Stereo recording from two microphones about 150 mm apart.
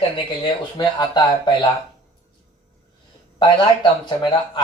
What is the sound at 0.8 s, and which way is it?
Speech, 30° left (ahead or behind).